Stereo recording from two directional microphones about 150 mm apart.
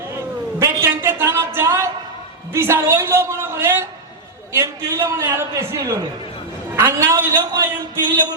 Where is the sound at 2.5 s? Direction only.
15° right (ahead or behind).